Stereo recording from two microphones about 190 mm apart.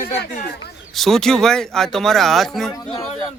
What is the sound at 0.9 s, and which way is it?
Speech, centre (ahead or behind).